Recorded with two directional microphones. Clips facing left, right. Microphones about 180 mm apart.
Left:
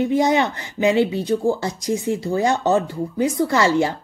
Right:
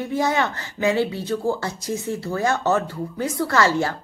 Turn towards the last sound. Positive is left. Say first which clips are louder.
# left 2 dB
turn(degrees=15)  # may be behind; listen again after turning